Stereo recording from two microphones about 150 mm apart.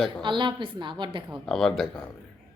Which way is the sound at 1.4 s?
5° left (ahead or behind).